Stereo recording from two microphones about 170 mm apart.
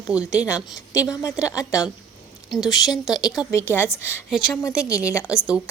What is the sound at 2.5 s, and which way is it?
Speech, centre (ahead or behind).